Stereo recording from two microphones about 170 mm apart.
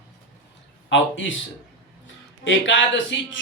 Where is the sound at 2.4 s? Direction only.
90° left.